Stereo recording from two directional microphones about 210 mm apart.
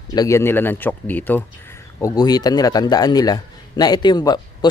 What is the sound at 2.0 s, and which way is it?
A man's voice, 20° left (ahead or behind).